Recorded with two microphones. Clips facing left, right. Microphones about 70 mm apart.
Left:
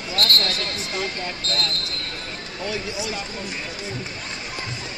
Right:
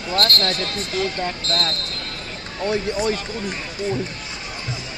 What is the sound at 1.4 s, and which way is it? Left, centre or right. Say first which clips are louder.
Speech: right 1 dB; left.